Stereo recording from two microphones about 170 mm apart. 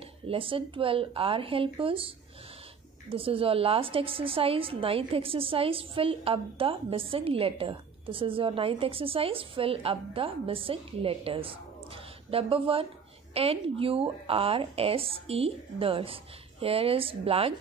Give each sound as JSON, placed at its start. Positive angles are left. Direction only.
{"t": 0.3, "sound": "a woman's voice", "side_deg": -30}